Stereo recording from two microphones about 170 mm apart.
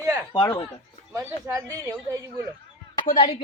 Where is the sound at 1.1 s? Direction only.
20° right (ahead or behind).